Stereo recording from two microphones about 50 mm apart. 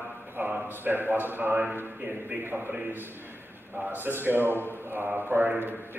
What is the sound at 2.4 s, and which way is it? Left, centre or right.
Speech, right.